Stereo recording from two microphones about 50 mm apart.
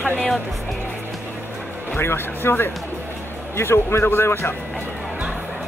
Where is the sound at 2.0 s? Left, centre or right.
Left.